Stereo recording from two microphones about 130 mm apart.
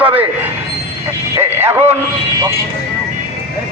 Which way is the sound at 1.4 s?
20° right (ahead or behind).